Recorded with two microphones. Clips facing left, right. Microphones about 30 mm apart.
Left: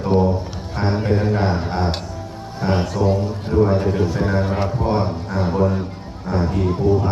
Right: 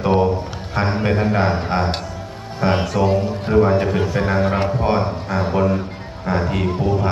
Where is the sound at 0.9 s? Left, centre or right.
Right.